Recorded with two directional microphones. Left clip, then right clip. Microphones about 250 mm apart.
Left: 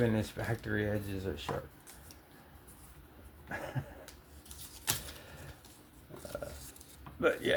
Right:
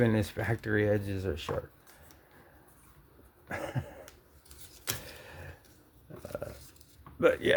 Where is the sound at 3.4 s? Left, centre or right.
Right.